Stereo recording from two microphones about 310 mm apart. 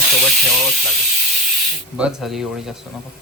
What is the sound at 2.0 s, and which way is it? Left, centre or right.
Speech, centre.